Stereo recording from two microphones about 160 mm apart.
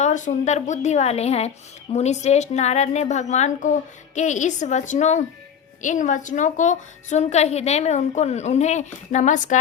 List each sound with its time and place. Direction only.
0.0 s a woman's voice: 50° left (ahead or behind)